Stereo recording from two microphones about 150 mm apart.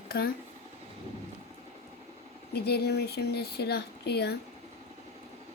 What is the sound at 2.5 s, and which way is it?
Speech, 90° left.